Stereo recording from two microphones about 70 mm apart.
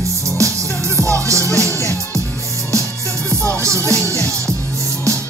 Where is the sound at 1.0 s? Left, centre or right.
Right.